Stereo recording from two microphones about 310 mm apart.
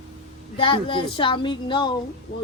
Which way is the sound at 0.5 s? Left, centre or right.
Centre.